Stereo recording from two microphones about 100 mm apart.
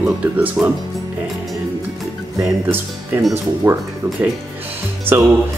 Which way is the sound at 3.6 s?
25° right (ahead or behind).